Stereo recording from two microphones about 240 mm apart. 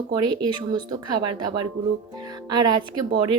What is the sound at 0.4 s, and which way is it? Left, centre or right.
Speech, centre.